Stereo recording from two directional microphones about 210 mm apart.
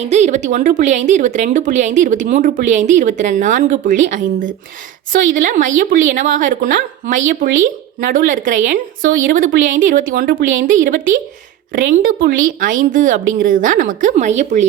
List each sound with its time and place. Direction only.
0.0 s speech: 35° right (ahead or behind)